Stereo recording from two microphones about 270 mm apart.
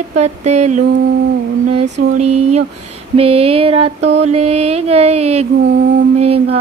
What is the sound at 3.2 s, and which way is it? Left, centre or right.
Mantra, right.